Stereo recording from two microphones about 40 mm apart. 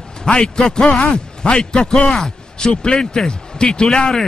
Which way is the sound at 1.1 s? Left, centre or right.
Centre.